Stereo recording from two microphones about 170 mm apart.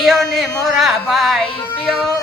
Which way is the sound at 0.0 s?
Centre (ahead or behind).